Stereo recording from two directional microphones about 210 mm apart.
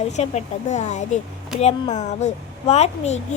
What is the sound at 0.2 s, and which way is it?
A child's voice, 30° left (ahead or behind).